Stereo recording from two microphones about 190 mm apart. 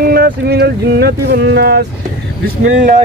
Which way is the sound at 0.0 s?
55° right (ahead or behind).